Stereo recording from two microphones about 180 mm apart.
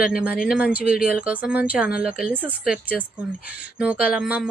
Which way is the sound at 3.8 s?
5° right (ahead or behind).